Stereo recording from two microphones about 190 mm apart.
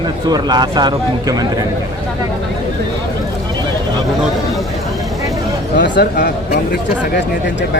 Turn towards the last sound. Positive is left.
turn(degrees=65)  # may be behind; listen again after turning